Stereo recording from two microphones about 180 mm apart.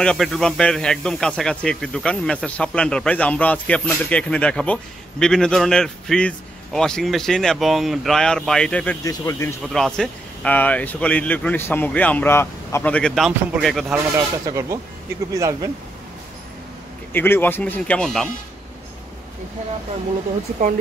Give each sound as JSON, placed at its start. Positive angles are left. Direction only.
{"t": 0.0, "sound": "speech", "side_deg": 5}
{"t": 9.0, "sound": "speech", "side_deg": 20}
{"t": 9.7, "sound": "speech", "side_deg": 5}
{"t": 14.1, "sound": "speech", "side_deg": -15}
{"t": 17.1, "sound": "speech", "side_deg": 10}